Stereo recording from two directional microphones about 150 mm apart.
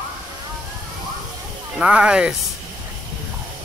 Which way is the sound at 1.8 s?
5° right (ahead or behind).